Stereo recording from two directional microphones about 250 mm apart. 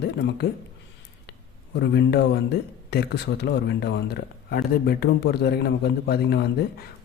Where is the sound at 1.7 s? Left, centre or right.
Left.